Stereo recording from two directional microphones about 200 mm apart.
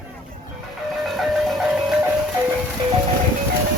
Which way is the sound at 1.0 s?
Centre (ahead or behind).